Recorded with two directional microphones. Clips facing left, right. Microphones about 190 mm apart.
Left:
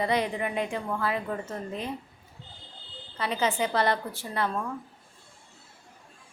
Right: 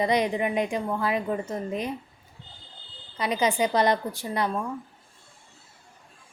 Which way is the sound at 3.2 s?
15° right (ahead or behind).